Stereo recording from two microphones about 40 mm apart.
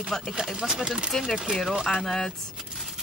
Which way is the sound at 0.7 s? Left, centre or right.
Centre.